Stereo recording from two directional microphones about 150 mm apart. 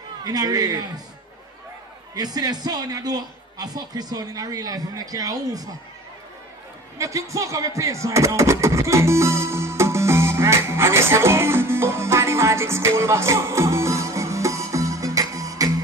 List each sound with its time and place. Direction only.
0.2 s a man's voice: 25° right (ahead or behind)
2.1 s a man's voice: 25° right (ahead or behind)
7.0 s a sound: 20° right (ahead or behind)